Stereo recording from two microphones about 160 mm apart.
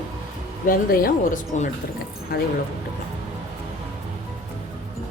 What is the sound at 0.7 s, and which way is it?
A woman's voice, 65° left (ahead or behind).